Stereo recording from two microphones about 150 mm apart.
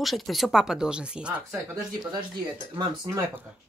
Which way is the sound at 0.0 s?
Centre (ahead or behind).